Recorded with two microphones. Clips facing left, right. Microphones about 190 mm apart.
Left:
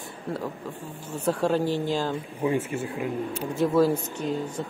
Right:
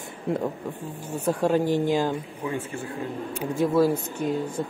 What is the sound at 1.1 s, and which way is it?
Speech, 15° right (ahead or behind).